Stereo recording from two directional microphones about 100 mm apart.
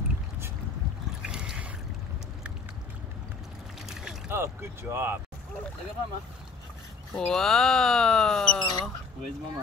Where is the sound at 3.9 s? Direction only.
5° right (ahead or behind).